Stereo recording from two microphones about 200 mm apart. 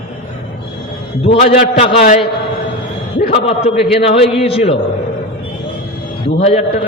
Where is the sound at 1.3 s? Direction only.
30° left (ahead or behind).